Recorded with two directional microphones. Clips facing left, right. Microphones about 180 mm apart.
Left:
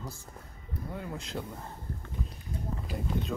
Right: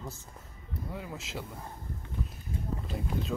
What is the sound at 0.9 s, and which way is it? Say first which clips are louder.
Speech: left 4 dB; 5° right (ahead or behind).